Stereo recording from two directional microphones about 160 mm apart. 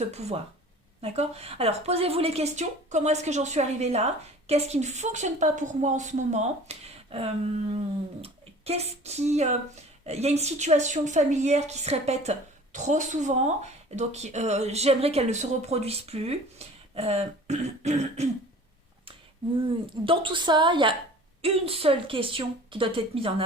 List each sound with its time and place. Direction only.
0.0 s a woman's voice: 40° right (ahead or behind)
20.1 s a woman's voice: 30° right (ahead or behind)